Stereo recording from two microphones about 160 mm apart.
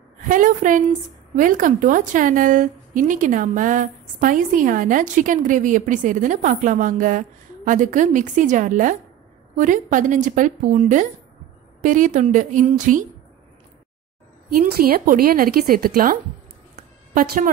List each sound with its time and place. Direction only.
0.3 s a woman's voice: 55° right (ahead or behind)
14.5 s a woman's voice: 65° right (ahead or behind)